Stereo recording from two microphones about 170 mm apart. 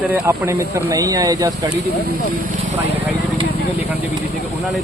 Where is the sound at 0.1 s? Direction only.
15° right (ahead or behind).